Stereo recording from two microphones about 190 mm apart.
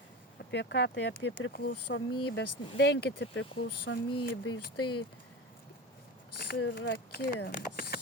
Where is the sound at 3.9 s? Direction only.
90° left.